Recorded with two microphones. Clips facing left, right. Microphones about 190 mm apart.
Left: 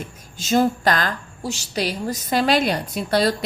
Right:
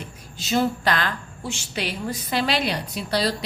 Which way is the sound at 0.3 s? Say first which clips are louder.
Left 4 dB; 45° left (ahead or behind).